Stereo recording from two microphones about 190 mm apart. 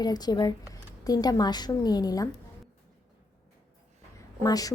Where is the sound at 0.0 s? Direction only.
20° left (ahead or behind).